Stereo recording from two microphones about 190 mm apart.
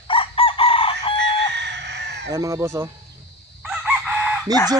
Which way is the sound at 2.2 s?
15° right (ahead or behind).